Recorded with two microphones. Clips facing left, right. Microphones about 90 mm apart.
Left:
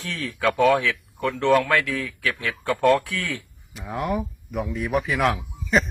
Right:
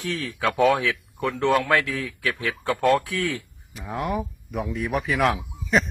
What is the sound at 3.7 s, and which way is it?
Speech, centre (ahead or behind).